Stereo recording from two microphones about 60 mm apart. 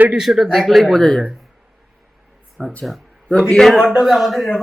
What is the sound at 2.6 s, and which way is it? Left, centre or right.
A man's voice, centre.